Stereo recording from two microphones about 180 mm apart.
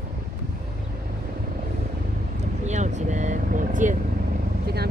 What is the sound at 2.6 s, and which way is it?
Vehicle, 40° right (ahead or behind).